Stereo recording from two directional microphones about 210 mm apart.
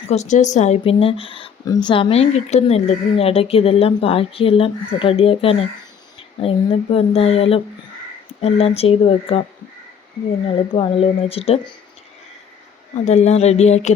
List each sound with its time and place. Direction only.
0.1 s speech: 35° left (ahead or behind)
10.4 s speech: 25° left (ahead or behind)
13.1 s speech: 30° left (ahead or behind)